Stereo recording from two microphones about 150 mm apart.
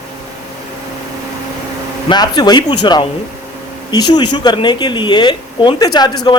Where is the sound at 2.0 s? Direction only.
30° left (ahead or behind).